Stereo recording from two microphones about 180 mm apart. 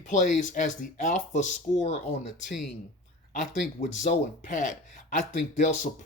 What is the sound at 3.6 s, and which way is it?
Speech, 40° left (ahead or behind).